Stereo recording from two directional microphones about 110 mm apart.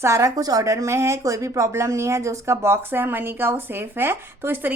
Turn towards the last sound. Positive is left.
turn(degrees=-20)  # may be behind; listen again after turning